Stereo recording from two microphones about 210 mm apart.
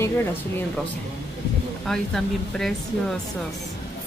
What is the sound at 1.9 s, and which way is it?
Speech, centre (ahead or behind).